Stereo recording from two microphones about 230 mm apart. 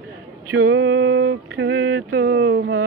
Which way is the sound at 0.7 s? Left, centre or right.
Right.